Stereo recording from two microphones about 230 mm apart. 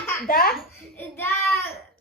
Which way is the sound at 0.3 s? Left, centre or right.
Left.